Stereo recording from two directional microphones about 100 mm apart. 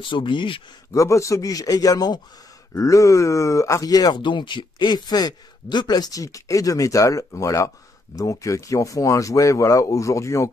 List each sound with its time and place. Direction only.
0.0 s speech: 55° left (ahead or behind)
0.9 s speech: 30° left (ahead or behind)